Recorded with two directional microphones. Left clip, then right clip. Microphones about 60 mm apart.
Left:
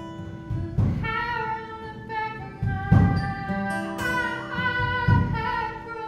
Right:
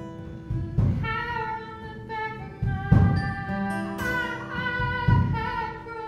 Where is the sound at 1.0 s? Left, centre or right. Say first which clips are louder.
Left 2 dB; centre.